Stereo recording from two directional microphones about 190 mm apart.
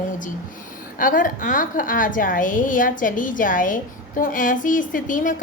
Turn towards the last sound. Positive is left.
turn(degrees=45)  # may be behind; listen again after turning